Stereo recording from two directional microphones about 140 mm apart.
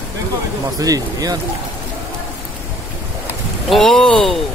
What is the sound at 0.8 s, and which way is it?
Speech, 25° right (ahead or behind).